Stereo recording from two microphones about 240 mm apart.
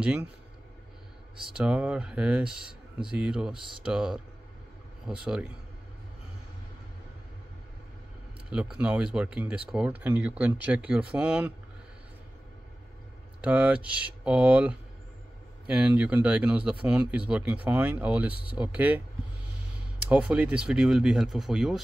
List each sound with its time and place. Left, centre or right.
0.0 s speech: centre
1.5 s speech: centre
8.5 s speech: centre
13.4 s speech: centre
20.1 s speech: centre